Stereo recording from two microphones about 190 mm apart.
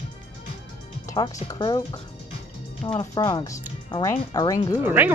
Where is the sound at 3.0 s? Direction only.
20° left (ahead or behind).